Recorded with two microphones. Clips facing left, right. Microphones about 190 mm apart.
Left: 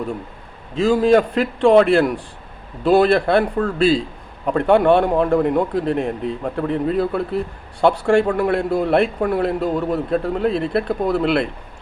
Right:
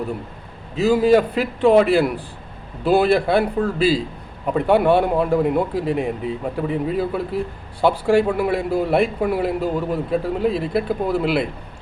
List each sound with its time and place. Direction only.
0.8 s a man's voice: 5° right (ahead or behind)